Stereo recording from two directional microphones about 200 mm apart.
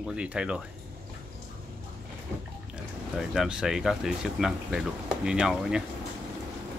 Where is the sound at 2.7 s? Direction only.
5° right (ahead or behind).